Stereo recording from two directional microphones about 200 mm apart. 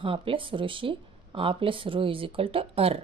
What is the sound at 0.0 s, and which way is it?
Speech, 25° right (ahead or behind).